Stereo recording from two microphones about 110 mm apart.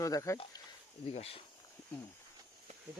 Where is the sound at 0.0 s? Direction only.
30° left (ahead or behind).